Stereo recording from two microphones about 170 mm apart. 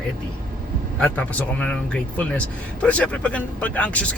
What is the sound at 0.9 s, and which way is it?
Speech, 5° left (ahead or behind).